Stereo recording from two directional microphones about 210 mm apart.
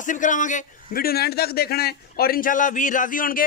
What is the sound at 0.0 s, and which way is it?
A man's voice, 35° left (ahead or behind).